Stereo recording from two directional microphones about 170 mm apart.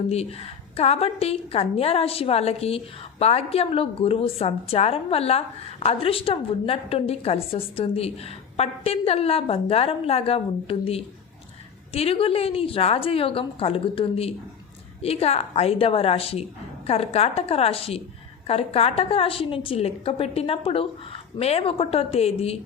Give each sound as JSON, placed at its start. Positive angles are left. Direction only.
{"t": 0.1, "sound": "a woman's voice", "side_deg": 35}